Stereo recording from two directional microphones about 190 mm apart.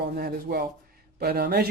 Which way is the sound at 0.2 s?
55° right (ahead or behind).